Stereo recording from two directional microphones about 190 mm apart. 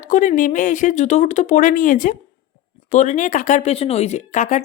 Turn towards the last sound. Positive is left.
turn(degrees=40)  # may be behind; listen again after turning